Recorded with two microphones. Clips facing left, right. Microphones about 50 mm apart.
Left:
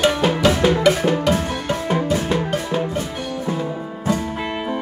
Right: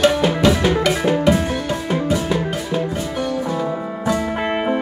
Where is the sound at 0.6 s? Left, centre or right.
Centre.